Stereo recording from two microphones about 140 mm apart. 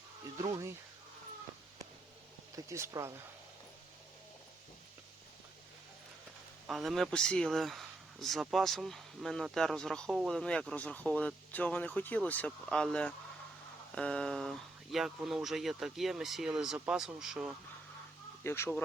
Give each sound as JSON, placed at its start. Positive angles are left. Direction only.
{"t": 0.3, "sound": "speech", "side_deg": -25}
{"t": 2.6, "sound": "speech", "side_deg": -20}
{"t": 6.7, "sound": "speech", "side_deg": 0}
{"t": 18.4, "sound": "speech", "side_deg": 20}